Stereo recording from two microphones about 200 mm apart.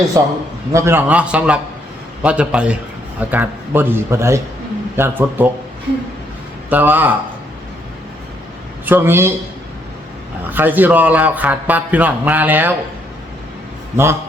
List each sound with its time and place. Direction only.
0.1 s a man's voice: 15° right (ahead or behind)
6.7 s a man's voice: 10° right (ahead or behind)
8.9 s a man's voice: 10° right (ahead or behind)
10.5 s a man's voice: 10° right (ahead or behind)
13.9 s a man's voice: 10° right (ahead or behind)